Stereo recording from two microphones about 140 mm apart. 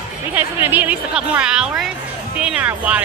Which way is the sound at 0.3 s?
15° right (ahead or behind).